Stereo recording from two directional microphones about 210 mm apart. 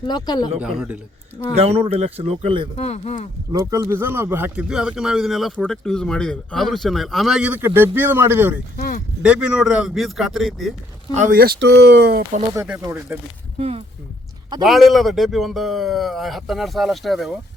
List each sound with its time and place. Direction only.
0.1 s speech: 20° left (ahead or behind)
0.6 s speech: 5° right (ahead or behind)
1.5 s speech: 30° right (ahead or behind)
2.7 s speech: 30° left (ahead or behind)
3.5 s speech: 15° right (ahead or behind)
8.7 s speech: 45° left (ahead or behind)
9.2 s speech: 5° right (ahead or behind)
11.1 s speech: 40° right (ahead or behind)
12.5 s speech: 10° right (ahead or behind)
13.6 s speech: 30° right (ahead or behind)
14.6 s speech: centre (ahead or behind)